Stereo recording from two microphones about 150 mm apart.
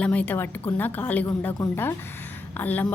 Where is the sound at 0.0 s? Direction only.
10° left (ahead or behind).